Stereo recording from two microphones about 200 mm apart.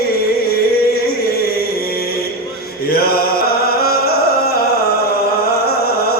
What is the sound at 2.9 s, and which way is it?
Chant, 50° left (ahead or behind).